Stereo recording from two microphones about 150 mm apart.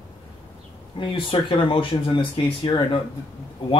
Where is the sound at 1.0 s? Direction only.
35° left (ahead or behind).